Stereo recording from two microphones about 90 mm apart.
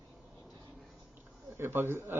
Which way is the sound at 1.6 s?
25° right (ahead or behind).